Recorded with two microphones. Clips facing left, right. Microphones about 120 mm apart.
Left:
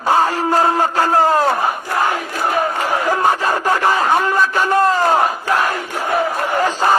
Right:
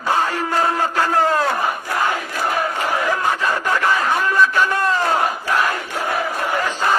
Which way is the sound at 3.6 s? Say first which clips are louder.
Left 4 dB; 35° left (ahead or behind).